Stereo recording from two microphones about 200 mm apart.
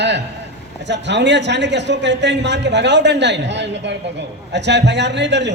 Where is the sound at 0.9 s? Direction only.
60° right (ahead or behind).